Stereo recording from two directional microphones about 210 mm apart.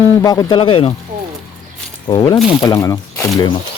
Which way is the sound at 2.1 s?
20° left (ahead or behind).